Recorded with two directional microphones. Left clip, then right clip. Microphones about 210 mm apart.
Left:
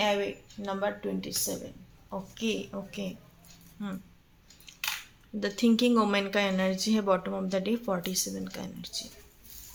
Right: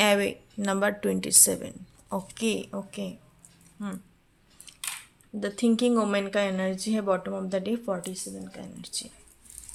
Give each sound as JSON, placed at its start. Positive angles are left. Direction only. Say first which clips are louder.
{"t": 0.0, "sound": "speech", "louder": "right 5 dB", "side_deg": -45}
{"t": 5.4, "sound": "speech", "louder": "right 1 dB", "side_deg": -10}
{"t": 8.8, "sound": "speech", "louder": "right 3 dB", "side_deg": -20}